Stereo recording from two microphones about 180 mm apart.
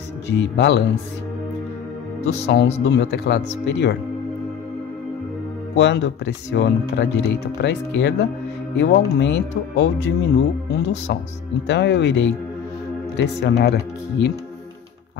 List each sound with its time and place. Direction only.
0.3 s speech: 70° left (ahead or behind)
2.4 s speech: 70° left (ahead or behind)
5.8 s speech: 70° left (ahead or behind)